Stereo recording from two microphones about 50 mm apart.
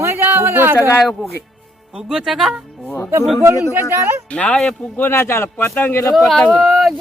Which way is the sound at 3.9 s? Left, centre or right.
Right.